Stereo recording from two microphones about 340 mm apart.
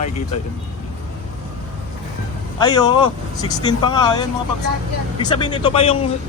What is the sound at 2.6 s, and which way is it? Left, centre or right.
Speech, centre.